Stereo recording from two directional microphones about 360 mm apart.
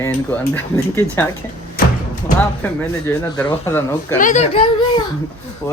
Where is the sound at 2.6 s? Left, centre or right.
Centre.